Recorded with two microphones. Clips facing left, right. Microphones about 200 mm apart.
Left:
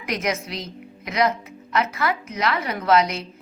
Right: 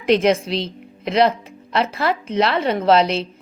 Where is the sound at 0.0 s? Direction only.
30° right (ahead or behind).